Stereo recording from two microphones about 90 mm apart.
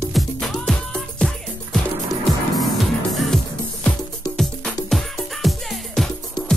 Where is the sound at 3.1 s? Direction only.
Centre (ahead or behind).